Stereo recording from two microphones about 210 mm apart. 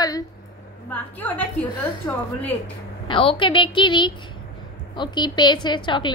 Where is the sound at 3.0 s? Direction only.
25° left (ahead or behind).